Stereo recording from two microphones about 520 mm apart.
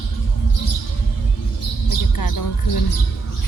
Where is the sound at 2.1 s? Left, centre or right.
Left.